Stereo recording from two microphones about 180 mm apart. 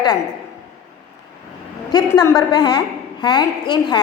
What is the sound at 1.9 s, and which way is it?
A woman's voice, 20° left (ahead or behind).